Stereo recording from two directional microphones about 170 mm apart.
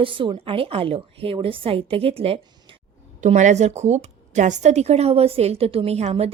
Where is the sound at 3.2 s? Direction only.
45° right (ahead or behind).